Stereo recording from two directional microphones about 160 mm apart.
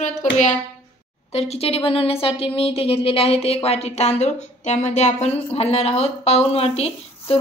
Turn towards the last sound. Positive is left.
turn(degrees=40)  # may be behind; listen again after turning